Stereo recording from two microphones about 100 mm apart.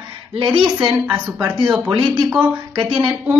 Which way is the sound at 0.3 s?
60° right (ahead or behind).